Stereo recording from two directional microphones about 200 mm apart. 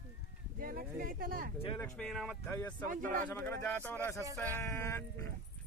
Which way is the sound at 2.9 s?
40° right (ahead or behind).